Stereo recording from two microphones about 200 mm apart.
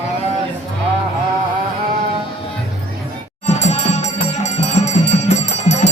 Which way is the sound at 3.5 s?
35° left (ahead or behind).